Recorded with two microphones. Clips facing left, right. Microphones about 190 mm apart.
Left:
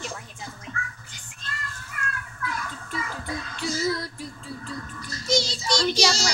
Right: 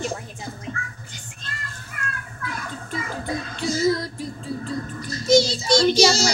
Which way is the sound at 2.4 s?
40° right (ahead or behind).